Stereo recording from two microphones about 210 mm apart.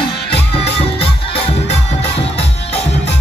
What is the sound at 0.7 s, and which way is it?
Music, 25° left (ahead or behind).